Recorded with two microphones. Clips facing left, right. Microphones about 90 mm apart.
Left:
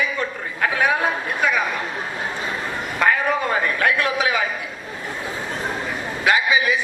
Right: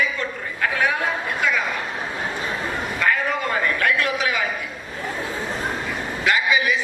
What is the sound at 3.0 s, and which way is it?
A man's voice, 20° left (ahead or behind).